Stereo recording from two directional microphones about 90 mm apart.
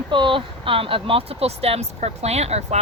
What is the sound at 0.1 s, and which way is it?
Speech, 70° right (ahead or behind).